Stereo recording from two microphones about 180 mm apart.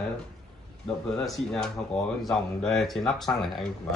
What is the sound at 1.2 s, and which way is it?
Speech, centre (ahead or behind).